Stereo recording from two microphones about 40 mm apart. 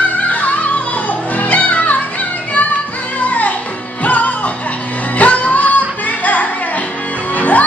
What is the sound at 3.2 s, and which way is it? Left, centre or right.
Music, left.